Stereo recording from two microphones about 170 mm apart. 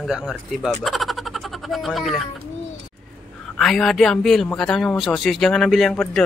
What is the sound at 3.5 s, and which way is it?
Speech, 5° left (ahead or behind).